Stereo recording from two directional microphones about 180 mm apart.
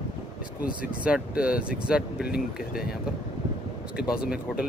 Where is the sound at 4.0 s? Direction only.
5° right (ahead or behind).